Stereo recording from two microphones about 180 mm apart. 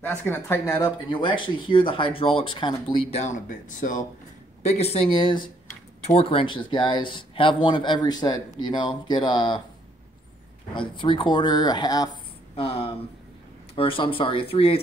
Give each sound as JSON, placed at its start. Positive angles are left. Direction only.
{"t": 0.0, "sound": "speech", "side_deg": 10}
{"t": 4.6, "sound": "speech", "side_deg": 35}
{"t": 10.7, "sound": "speech", "side_deg": 25}